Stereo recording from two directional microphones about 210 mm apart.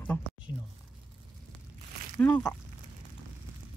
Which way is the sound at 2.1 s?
10° left (ahead or behind).